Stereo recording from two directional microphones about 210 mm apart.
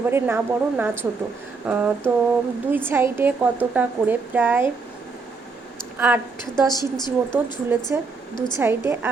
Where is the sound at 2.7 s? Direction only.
10° right (ahead or behind).